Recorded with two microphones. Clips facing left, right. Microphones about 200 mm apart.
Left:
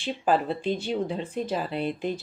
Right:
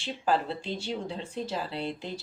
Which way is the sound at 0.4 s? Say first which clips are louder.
Left 6 dB; 15° left (ahead or behind).